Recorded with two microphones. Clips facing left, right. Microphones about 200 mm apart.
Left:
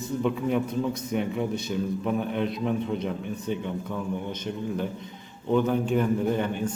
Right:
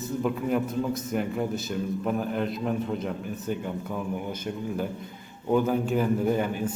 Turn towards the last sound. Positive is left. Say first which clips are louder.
# even
turn(degrees=-5)  # may be behind; listen again after turning